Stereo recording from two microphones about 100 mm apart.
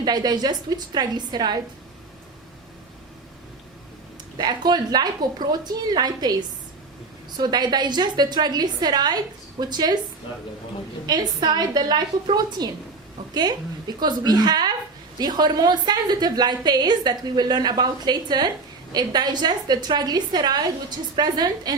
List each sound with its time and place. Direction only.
0.0 s a woman's voice: 45° right (ahead or behind)
4.4 s a woman's voice: 45° right (ahead or behind)
7.3 s a woman's voice: 45° right (ahead or behind)
11.0 s a woman's voice: 45° right (ahead or behind)